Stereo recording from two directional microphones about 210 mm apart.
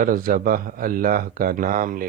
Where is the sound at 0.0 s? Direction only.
40° right (ahead or behind).